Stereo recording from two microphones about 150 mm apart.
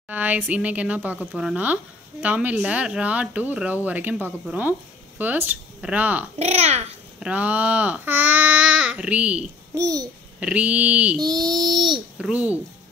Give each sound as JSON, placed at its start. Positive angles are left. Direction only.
{"t": 0.1, "sound": "speech", "side_deg": -10}
{"t": 6.3, "sound": "a child's voice", "side_deg": -45}
{"t": 7.2, "sound": "speech", "side_deg": -10}
{"t": 9.8, "sound": "child singing", "side_deg": -20}
{"t": 10.4, "sound": "speech", "side_deg": -10}
{"t": 11.1, "sound": "child singing", "side_deg": -25}
{"t": 12.2, "sound": "speech", "side_deg": -10}